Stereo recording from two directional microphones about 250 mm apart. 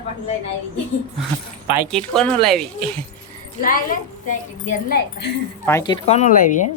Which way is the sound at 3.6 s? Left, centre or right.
Left.